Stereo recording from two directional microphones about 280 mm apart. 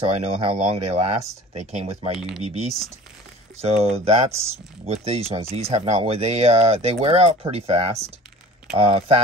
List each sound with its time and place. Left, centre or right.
0.2 s speech: right